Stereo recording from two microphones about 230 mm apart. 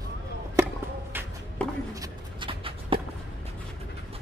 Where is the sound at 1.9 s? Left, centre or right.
Centre.